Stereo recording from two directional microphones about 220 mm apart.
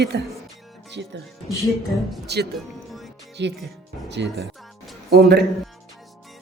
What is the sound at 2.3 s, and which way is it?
A woman's voice, 50° right (ahead or behind).